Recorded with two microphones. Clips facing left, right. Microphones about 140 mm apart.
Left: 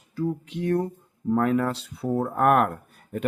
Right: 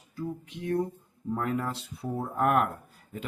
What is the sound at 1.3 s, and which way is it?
Speech, 70° left (ahead or behind).